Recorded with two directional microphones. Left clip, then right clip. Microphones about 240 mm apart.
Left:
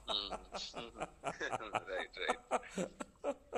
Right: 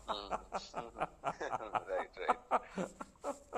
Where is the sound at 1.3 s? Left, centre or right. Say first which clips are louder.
Right 2 dB; left.